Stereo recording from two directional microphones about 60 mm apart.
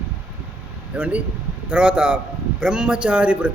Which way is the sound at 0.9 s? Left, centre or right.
Right.